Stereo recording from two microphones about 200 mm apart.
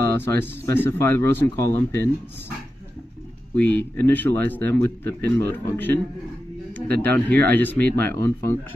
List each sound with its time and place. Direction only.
0.2 s speech: 10° left (ahead or behind)
3.5 s speech: 10° left (ahead or behind)
7.2 s speech: 5° left (ahead or behind)